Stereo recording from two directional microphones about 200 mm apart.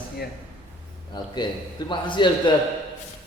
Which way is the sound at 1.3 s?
25° left (ahead or behind).